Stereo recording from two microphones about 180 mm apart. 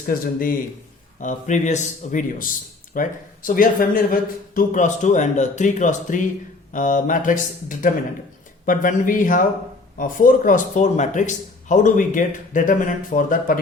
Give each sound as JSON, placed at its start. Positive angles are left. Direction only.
{"t": 1.2, "sound": "speech", "side_deg": 45}